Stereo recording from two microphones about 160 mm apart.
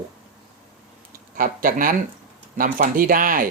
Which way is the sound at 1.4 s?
60° right (ahead or behind).